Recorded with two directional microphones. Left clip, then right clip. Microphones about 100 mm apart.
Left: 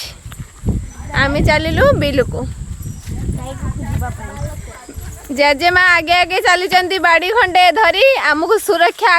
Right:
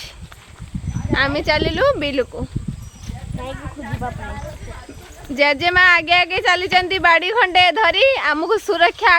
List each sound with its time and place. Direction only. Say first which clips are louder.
1.1 s speech: left 3 dB; 45° left (ahead or behind); by 2.5 s 90° left
5.3 s speech: left 4 dB; 65° left (ahead or behind)
8.4 s speech: left 3 dB; 50° left (ahead or behind)